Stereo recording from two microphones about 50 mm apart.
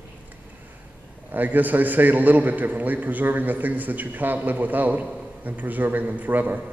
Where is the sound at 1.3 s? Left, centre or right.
Right.